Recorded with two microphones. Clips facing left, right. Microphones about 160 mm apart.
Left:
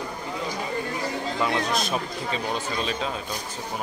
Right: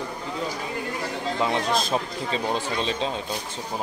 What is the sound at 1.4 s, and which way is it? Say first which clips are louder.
Speech: right 2 dB; 30° right (ahead or behind).